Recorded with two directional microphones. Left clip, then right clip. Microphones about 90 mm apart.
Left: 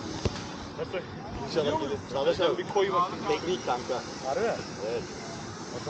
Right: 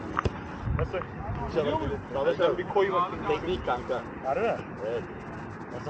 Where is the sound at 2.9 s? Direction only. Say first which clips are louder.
Even; 10° left (ahead or behind).